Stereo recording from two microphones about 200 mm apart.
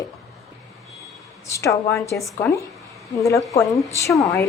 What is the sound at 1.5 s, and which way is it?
Speech, 15° left (ahead or behind).